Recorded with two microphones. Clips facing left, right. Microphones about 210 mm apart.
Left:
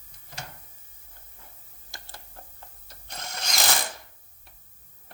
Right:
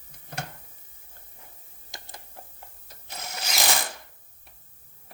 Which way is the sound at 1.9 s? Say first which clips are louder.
Right 2 dB; 20° right (ahead or behind).